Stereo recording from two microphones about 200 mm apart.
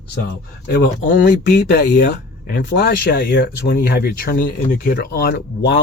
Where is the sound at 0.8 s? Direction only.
45° left (ahead or behind).